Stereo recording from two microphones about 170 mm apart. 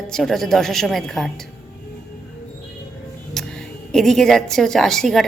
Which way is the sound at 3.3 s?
5° left (ahead or behind).